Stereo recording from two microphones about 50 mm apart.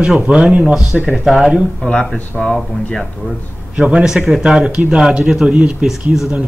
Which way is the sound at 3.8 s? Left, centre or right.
Right.